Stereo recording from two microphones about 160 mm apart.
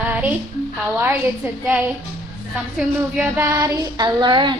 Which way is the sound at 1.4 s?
15° right (ahead or behind).